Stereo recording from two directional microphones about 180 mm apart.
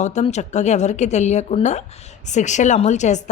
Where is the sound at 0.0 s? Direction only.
40° left (ahead or behind).